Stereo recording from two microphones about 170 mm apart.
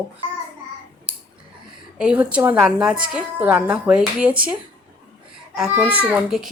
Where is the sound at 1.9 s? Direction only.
5° right (ahead or behind).